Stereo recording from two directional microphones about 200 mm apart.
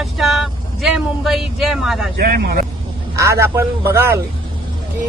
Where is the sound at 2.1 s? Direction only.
50° right (ahead or behind).